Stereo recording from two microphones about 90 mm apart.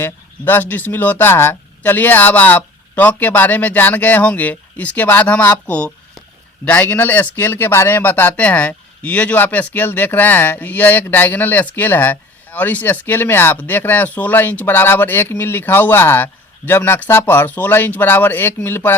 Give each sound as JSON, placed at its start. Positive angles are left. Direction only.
{"t": 0.0, "sound": "speech", "side_deg": 20}